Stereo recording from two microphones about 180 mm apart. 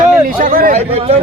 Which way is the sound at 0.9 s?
35° right (ahead or behind).